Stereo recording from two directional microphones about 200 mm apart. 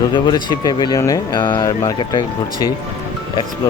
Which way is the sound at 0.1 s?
20° left (ahead or behind).